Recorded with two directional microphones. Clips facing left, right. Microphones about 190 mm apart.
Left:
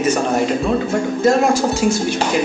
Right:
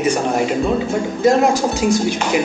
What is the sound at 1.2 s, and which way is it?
Speech, 15° right (ahead or behind).